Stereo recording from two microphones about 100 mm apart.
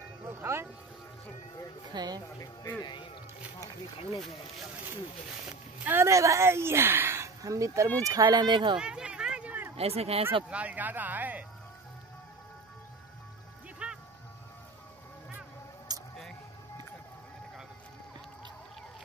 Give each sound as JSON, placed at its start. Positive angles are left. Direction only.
{"t": 0.4, "sound": "music", "side_deg": -25}
{"t": 2.0, "sound": "speech", "side_deg": -40}
{"t": 2.8, "sound": "speech", "side_deg": 50}
{"t": 5.9, "sound": "speech", "side_deg": -25}
{"t": 8.7, "sound": "a sound", "side_deg": -10}
{"t": 9.8, "sound": "speech", "side_deg": -85}
{"t": 10.5, "sound": "speech", "side_deg": -15}
{"t": 13.8, "sound": "music", "side_deg": -10}
{"t": 15.9, "sound": "music", "side_deg": -40}